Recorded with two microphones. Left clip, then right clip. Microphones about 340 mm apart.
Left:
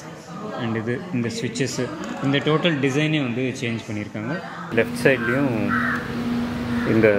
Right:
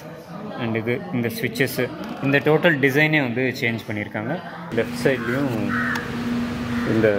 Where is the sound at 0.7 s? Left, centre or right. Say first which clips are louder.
Right 2 dB; centre.